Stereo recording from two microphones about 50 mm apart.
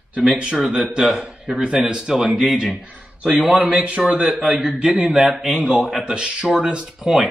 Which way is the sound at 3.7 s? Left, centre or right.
Centre.